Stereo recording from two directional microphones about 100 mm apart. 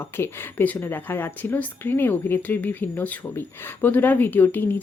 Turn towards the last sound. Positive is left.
turn(degrees=20)  # may be behind; listen again after turning